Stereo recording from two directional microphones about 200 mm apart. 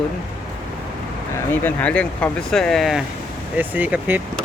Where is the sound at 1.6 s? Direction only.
5° left (ahead or behind).